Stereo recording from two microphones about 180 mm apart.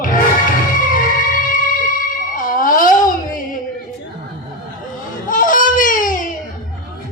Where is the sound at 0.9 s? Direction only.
50° left (ahead or behind).